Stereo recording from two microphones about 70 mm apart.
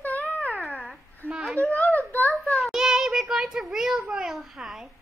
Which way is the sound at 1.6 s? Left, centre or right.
Centre.